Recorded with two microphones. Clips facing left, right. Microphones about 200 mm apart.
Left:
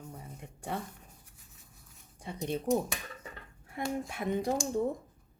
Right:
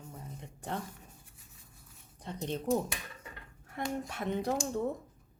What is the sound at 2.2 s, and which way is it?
Speech, 10° left (ahead or behind).